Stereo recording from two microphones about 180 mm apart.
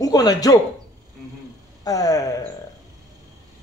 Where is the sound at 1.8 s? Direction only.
20° left (ahead or behind).